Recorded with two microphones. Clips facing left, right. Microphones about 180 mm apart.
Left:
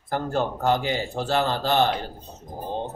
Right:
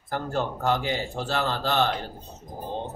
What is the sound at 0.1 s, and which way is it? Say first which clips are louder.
Speech: left 3 dB; 15° left (ahead or behind).